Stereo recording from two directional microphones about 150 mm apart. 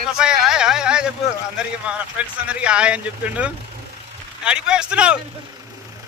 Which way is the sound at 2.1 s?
5° right (ahead or behind).